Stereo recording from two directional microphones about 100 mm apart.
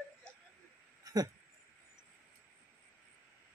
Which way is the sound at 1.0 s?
40° right (ahead or behind).